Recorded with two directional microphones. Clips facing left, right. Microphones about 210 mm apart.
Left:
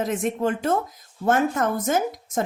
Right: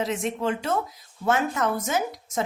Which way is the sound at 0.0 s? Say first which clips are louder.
Left 3 dB; 50° left (ahead or behind).